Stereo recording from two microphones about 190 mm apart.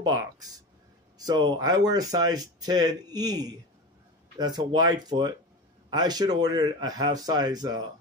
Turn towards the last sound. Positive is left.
turn(degrees=-20)  # may be behind; listen again after turning